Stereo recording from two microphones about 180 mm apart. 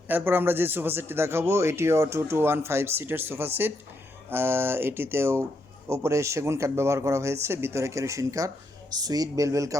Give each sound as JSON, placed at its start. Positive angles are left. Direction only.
{"t": 0.1, "sound": "speech", "side_deg": -10}